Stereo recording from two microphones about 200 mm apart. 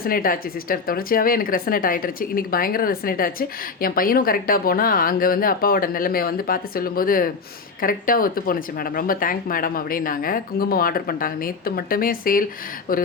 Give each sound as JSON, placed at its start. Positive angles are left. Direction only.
{"t": 0.0, "sound": "speech", "side_deg": 45}